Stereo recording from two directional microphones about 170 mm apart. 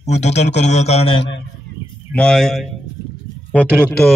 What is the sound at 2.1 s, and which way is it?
Speech, 5° left (ahead or behind).